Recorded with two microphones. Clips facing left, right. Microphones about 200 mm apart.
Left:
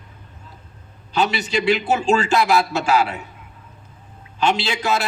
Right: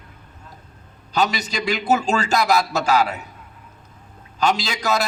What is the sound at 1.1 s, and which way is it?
A man's voice, 40° right (ahead or behind).